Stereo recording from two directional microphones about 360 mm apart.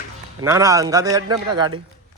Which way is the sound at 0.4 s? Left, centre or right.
Centre.